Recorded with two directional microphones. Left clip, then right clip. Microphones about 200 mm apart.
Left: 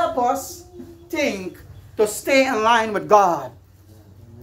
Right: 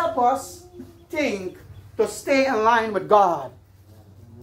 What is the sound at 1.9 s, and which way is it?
A woman's voice, 50° left (ahead or behind).